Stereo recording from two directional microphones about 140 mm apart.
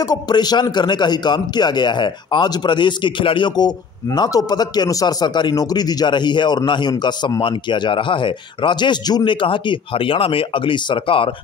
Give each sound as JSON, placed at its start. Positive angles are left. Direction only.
{"t": 0.0, "sound": "a man's voice", "side_deg": 30}